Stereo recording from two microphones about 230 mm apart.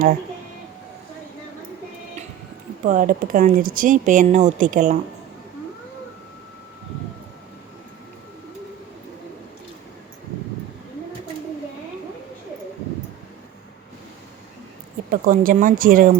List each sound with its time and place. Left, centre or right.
2.8 s speech: right
15.1 s speech: right